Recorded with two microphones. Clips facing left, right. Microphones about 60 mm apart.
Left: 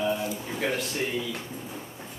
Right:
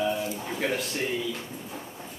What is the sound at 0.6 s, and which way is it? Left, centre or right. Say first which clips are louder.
Speech: even; centre.